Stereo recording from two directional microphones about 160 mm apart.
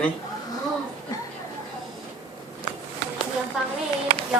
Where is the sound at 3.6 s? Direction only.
Centre (ahead or behind).